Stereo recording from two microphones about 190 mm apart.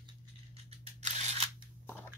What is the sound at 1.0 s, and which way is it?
Single-lens reflex camera, 35° right (ahead or behind).